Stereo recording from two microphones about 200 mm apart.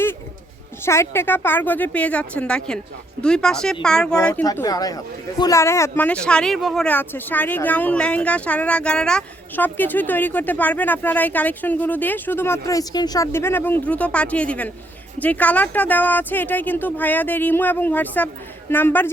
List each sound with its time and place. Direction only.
0.9 s speech: 10° left (ahead or behind)
4.4 s speech: 15° left (ahead or behind)